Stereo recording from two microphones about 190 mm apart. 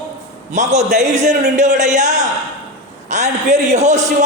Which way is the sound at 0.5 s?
35° right (ahead or behind).